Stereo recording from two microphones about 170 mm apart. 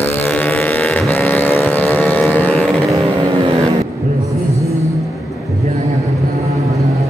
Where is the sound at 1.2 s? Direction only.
10° left (ahead or behind).